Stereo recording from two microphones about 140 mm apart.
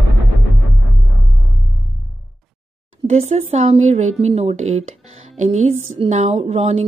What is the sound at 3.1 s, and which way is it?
A woman's voice, 50° right (ahead or behind).